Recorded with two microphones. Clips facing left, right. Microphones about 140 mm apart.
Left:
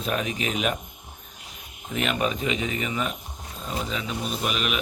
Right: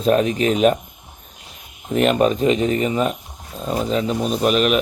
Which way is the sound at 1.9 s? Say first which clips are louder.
Right 10 dB; 40° right (ahead or behind).